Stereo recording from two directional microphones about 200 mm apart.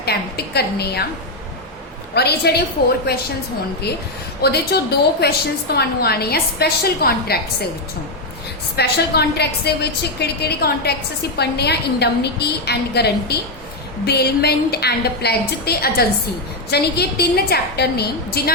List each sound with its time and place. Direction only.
0.0 s a woman's voice: 55° left (ahead or behind)
2.1 s a woman's voice: 55° left (ahead or behind)
4.4 s a woman's voice: 50° left (ahead or behind)
8.7 s a woman's voice: 55° left (ahead or behind)